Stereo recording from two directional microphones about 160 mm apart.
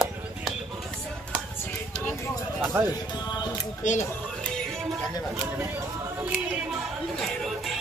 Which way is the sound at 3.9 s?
50° left (ahead or behind).